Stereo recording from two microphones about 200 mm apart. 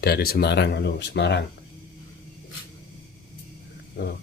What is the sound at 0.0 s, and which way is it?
Speech, 50° left (ahead or behind).